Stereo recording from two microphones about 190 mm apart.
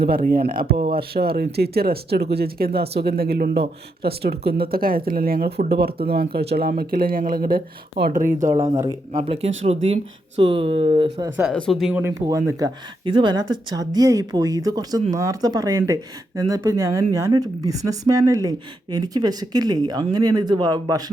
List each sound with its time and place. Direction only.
0.0 s speech: 50° right (ahead or behind)
9.1 s speech: 30° right (ahead or behind)
11.5 s speech: 5° left (ahead or behind); by 21.0 s 20° right (ahead or behind)